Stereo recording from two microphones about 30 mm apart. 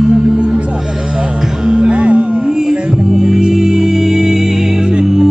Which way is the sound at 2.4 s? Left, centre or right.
Centre.